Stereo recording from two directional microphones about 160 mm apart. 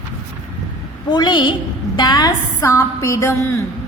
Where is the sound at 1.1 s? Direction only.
30° left (ahead or behind).